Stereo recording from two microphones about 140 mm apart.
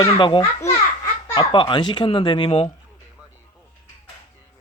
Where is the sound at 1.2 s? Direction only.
30° left (ahead or behind).